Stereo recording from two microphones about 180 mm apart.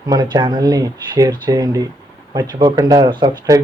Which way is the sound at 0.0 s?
25° right (ahead or behind).